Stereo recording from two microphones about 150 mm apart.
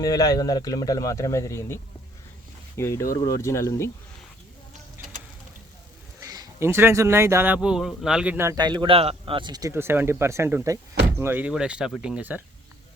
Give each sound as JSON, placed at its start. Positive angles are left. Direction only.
{"t": 0.0, "sound": "speech", "side_deg": 25}
{"t": 6.1, "sound": "speech", "side_deg": -25}